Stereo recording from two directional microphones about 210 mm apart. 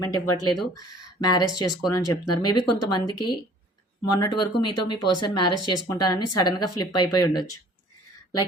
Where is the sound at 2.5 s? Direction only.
20° left (ahead or behind).